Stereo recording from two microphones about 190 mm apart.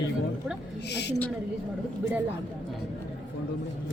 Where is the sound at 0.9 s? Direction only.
65° left (ahead or behind).